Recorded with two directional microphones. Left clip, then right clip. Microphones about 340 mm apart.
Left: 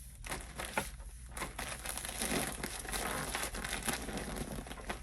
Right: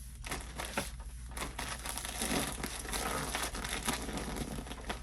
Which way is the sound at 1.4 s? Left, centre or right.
Centre.